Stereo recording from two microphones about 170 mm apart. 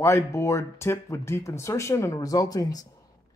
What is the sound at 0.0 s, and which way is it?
Speech, 15° left (ahead or behind).